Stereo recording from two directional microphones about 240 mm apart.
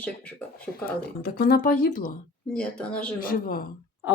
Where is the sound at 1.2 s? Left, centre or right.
Left.